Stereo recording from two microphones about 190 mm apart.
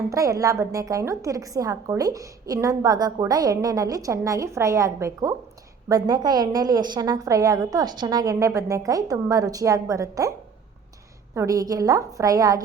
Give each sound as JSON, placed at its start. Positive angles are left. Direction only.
{"t": 0.1, "sound": "a woman's voice", "side_deg": -15}
{"t": 11.3, "sound": "a woman's voice", "side_deg": -20}